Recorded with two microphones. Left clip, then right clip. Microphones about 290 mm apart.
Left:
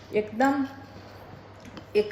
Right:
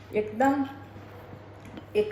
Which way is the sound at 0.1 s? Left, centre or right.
Left.